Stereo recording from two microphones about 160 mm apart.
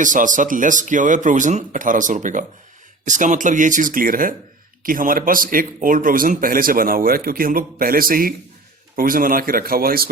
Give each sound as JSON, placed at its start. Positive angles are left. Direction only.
{"t": 0.0, "sound": "speech", "side_deg": -55}